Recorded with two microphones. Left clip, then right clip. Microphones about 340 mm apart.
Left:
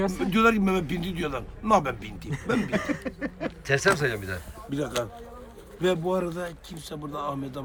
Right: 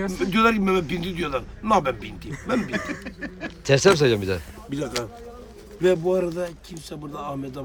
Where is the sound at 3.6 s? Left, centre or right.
Centre.